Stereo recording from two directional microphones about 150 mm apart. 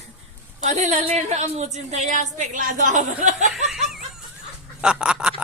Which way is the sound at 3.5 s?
Centre (ahead or behind).